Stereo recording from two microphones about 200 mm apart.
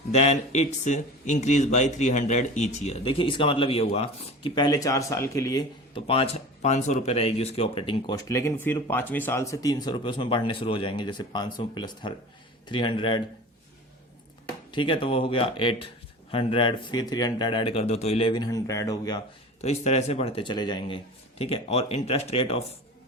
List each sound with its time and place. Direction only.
0.1 s speech: 35° left (ahead or behind)
14.7 s speech: 25° left (ahead or behind)
19.6 s speech: 35° left (ahead or behind)